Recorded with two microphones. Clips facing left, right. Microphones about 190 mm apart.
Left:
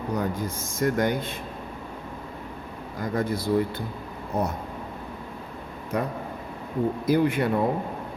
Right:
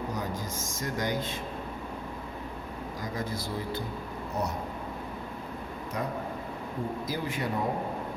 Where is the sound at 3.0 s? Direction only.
60° left (ahead or behind).